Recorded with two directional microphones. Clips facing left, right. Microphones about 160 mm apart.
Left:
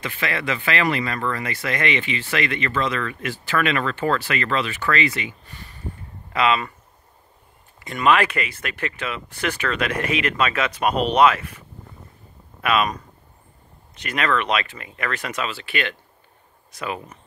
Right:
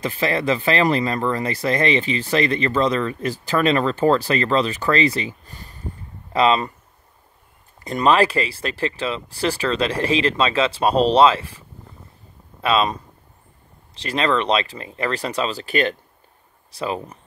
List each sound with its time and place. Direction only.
0.0 s speech: 35° right (ahead or behind)
7.8 s speech: 35° right (ahead or behind)
12.6 s speech: 25° right (ahead or behind)